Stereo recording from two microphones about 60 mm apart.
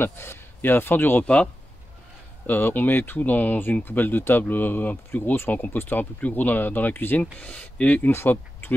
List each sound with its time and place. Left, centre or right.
0.0 s speech: left
1.2 s speech: centre
2.4 s speech: left
8.1 s speech: left